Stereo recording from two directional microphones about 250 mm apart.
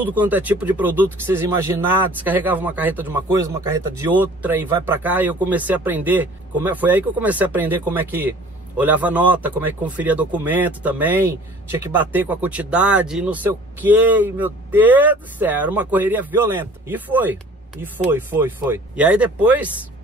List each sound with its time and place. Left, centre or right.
0.0 s speech: centre